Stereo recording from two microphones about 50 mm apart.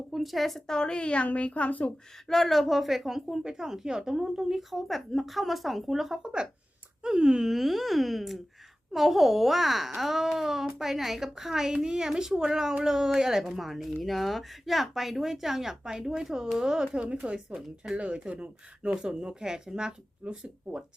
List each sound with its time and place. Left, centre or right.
0.1 s a woman's voice: centre
0.7 s a child's voice: centre
2.2 s a woman's voice: centre
6.2 s a woman's voice: centre